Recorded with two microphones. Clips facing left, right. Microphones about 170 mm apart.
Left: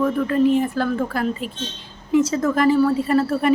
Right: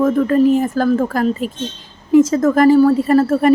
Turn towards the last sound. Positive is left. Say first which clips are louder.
# right 6 dB
turn(degrees=-45)  # may be behind; listen again after turning